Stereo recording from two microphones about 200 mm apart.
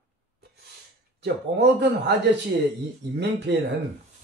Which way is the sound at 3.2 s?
55° right (ahead or behind).